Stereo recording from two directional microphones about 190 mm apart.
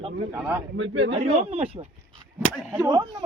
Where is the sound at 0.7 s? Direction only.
80° right.